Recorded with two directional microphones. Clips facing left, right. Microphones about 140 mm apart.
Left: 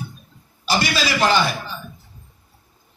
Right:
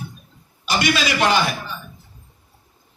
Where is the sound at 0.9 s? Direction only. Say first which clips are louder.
Even; 35° left (ahead or behind).